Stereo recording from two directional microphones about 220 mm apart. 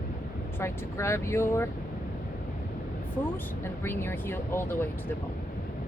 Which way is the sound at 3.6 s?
10° left (ahead or behind).